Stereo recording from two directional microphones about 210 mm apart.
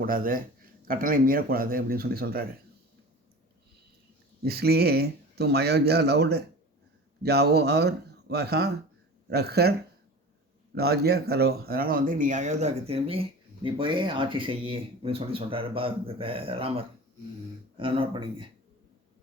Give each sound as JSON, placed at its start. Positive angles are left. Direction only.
{"t": 0.0, "sound": "speech", "side_deg": -40}
{"t": 4.4, "sound": "speech", "side_deg": -50}
{"t": 10.8, "sound": "speech", "side_deg": -50}